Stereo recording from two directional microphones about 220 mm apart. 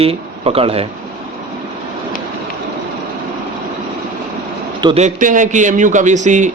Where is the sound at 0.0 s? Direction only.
25° right (ahead or behind).